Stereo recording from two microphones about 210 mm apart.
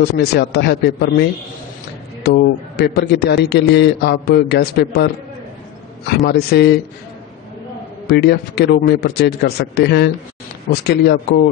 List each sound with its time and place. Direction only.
0.0 s a man's voice: 50° left (ahead or behind)
2.2 s a man's voice: 50° left (ahead or behind)
8.1 s a man's voice: 50° left (ahead or behind)